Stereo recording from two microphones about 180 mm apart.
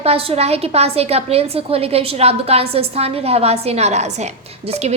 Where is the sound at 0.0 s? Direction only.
35° right (ahead or behind).